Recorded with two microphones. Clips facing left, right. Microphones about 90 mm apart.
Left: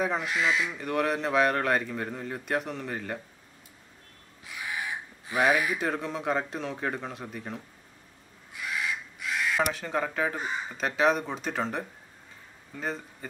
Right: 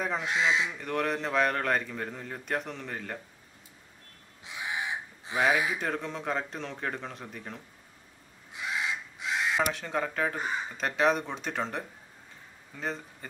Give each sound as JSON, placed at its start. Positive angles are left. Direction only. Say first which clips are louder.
{"t": 0.0, "sound": "a man's voice", "louder": "left 3 dB", "side_deg": 5}
{"t": 0.3, "sound": "speech", "louder": "even", "side_deg": -25}
{"t": 0.7, "sound": "a man's voice", "louder": "left 3 dB", "side_deg": 5}
{"t": 4.5, "sound": "crow", "louder": "right 1 dB", "side_deg": -25}
{"t": 5.5, "sound": "speech", "louder": "left 1 dB", "side_deg": -25}
{"t": 5.8, "sound": "a man's voice", "louder": "left 2 dB", "side_deg": 5}
{"t": 8.5, "sound": "crow", "louder": "even", "side_deg": -25}
{"t": 9.6, "sound": "a man's voice", "louder": "left 1 dB", "side_deg": 0}